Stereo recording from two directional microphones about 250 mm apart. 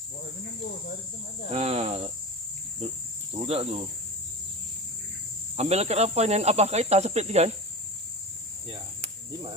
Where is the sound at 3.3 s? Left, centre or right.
Right.